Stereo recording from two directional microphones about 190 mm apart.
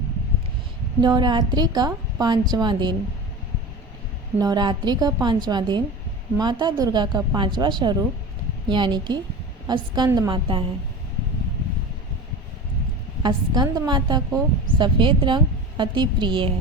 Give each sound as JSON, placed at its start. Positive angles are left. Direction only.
{"t": 1.0, "sound": "a woman's voice", "side_deg": -20}
{"t": 4.4, "sound": "a woman's voice", "side_deg": -20}
{"t": 13.2, "sound": "a woman's voice", "side_deg": -20}